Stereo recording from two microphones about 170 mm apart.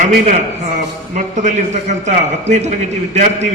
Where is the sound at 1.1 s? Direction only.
45° right (ahead or behind).